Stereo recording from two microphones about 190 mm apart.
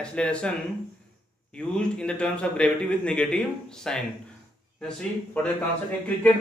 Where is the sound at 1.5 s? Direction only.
5° left (ahead or behind).